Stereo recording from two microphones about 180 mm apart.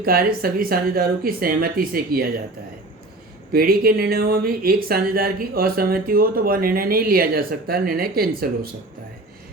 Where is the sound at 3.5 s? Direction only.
55° right (ahead or behind).